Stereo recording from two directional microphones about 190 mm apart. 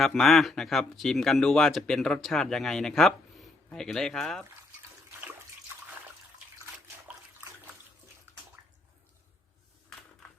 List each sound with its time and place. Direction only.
0.0 s speech: centre (ahead or behind)